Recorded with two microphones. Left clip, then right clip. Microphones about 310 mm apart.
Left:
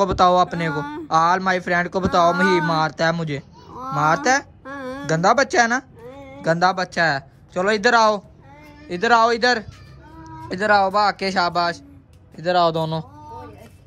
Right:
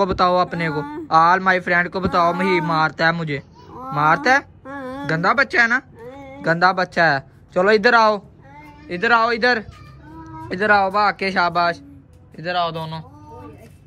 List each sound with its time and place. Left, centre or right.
0.0 s speech: centre